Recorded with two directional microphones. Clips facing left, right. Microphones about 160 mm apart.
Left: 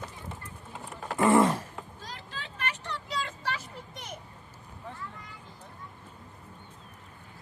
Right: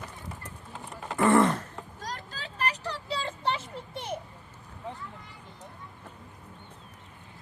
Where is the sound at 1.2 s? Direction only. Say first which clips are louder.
Even; 25° left (ahead or behind).